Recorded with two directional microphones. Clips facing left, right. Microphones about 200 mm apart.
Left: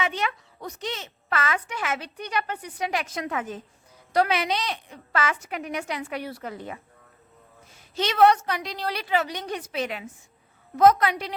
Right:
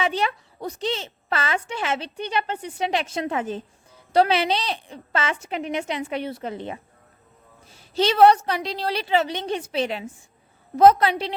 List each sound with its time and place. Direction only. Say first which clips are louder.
0.0 s speech: right 4 dB; 30° right (ahead or behind)